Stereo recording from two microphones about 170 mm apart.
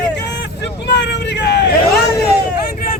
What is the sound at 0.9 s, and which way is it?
Hubbub, 80° left.